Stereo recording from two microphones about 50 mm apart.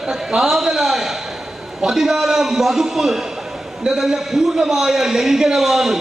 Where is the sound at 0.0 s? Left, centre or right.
Centre.